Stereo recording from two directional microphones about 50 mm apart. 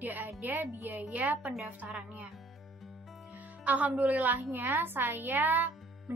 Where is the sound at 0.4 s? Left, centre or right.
Right.